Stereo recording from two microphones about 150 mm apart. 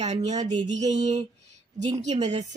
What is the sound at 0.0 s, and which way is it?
A woman's voice, 50° right (ahead or behind).